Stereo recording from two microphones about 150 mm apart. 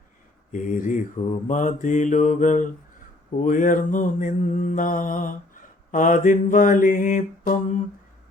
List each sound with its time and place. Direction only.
0.5 s mantra: 60° left (ahead or behind)